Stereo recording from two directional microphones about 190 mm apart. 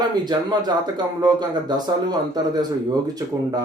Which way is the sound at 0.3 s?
25° right (ahead or behind).